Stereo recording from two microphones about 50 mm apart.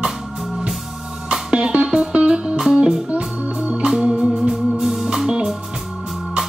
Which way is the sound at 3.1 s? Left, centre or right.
Right.